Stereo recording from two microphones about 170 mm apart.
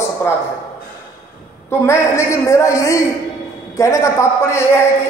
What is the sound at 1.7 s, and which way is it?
A man's voice, 15° left (ahead or behind).